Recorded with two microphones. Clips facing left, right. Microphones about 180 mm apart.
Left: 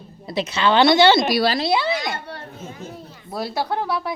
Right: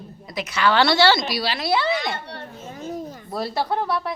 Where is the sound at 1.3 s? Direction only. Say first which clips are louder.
Left 7 dB; 45° left (ahead or behind).